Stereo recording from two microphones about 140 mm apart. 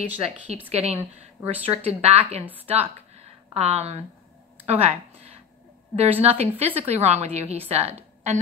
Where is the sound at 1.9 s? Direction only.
50° right (ahead or behind).